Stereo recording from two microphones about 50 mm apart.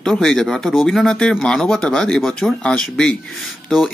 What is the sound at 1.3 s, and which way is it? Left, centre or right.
Speech, centre.